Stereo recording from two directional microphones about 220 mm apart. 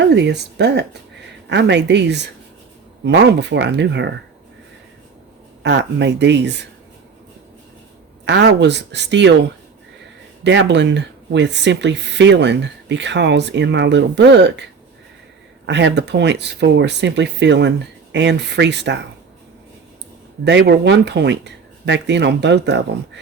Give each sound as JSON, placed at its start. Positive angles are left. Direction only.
{"t": 0.1, "sound": "speech", "side_deg": -50}
{"t": 5.6, "sound": "speech", "side_deg": -50}
{"t": 8.2, "sound": "speech", "side_deg": -50}
{"t": 10.4, "sound": "speech", "side_deg": -55}
{"t": 15.6, "sound": "speech", "side_deg": -55}
{"t": 20.4, "sound": "speech", "side_deg": -50}